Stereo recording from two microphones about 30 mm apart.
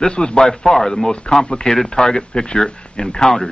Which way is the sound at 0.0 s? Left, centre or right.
Left.